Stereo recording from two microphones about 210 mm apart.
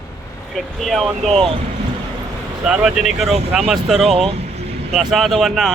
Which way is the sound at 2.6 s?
5° right (ahead or behind).